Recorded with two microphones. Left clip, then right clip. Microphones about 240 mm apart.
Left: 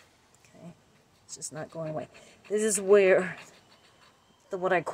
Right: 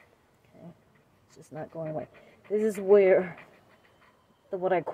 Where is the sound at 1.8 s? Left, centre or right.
Centre.